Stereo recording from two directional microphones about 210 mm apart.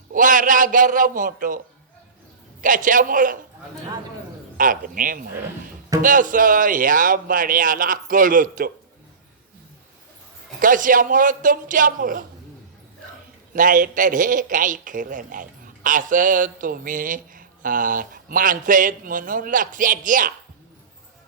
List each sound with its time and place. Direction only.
0.1 s a man's voice: 40° right (ahead or behind)
4.5 s a man's voice: 40° right (ahead or behind)
10.6 s a man's voice: 40° right (ahead or behind)
13.5 s a man's voice: 40° right (ahead or behind)